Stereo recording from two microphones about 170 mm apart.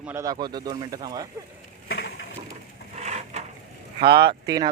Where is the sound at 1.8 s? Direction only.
90° left.